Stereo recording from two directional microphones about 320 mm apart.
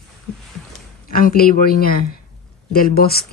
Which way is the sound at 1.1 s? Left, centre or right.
Left.